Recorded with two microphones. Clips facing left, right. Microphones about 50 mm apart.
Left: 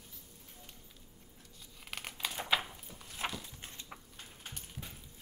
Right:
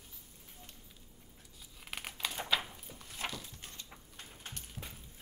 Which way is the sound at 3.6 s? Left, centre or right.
Centre.